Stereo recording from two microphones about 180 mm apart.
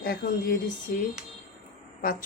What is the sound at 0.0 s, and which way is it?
A woman's voice, 60° left (ahead or behind).